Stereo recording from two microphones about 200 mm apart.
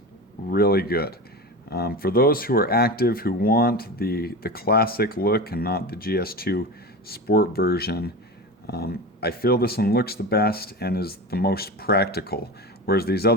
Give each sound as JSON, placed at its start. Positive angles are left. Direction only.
{"t": 0.4, "sound": "speech", "side_deg": 50}